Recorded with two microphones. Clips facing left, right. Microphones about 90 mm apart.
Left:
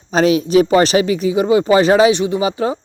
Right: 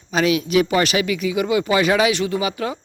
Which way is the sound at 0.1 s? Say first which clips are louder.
Left 5 dB; 35° left (ahead or behind).